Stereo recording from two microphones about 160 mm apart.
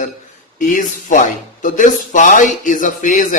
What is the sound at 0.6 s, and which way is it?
Speech, 55° left (ahead or behind).